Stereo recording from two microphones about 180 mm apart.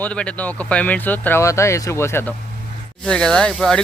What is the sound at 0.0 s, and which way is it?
Speech, 5° left (ahead or behind).